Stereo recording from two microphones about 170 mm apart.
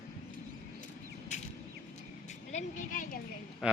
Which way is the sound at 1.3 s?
45° left (ahead or behind).